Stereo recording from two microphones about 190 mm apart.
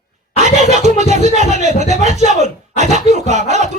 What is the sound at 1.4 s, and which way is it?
Speech, 35° right (ahead or behind).